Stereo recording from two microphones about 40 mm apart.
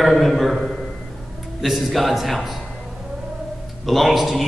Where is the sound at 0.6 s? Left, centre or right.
Centre.